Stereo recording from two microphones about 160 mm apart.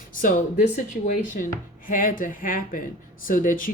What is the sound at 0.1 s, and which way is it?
Speech, 55° left (ahead or behind).